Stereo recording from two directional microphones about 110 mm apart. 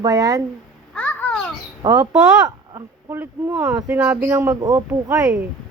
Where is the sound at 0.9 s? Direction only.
10° left (ahead or behind).